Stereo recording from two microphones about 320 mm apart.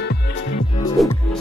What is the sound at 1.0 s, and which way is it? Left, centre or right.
Music, centre.